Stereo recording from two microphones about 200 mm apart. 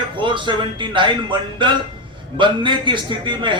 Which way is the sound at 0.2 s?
25° right (ahead or behind).